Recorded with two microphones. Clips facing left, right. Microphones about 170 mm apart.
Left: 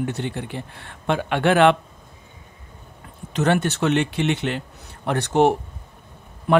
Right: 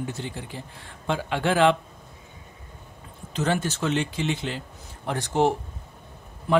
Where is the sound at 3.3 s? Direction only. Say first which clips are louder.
Left 5 dB; 70° left (ahead or behind).